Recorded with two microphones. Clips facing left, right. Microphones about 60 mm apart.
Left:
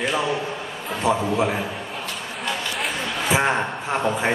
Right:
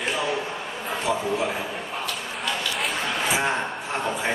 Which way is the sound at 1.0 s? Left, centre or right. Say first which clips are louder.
Left 5 dB; left.